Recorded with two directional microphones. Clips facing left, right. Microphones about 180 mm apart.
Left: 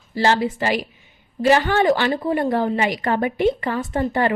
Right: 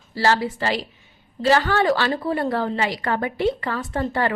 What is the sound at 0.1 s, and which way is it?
A woman's voice, 20° left (ahead or behind).